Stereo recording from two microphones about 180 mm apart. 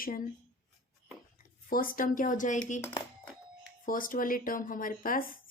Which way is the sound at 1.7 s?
50° left (ahead or behind).